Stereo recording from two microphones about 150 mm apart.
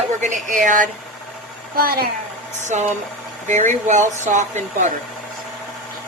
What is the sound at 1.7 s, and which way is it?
Speech, 80° right.